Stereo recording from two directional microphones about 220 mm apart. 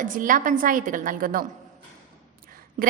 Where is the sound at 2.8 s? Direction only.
35° right (ahead or behind).